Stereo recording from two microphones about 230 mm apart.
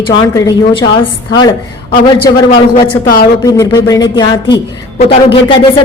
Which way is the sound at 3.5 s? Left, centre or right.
Centre.